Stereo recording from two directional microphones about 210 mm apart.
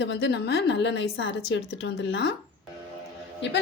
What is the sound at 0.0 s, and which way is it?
A woman's voice, 55° left (ahead or behind).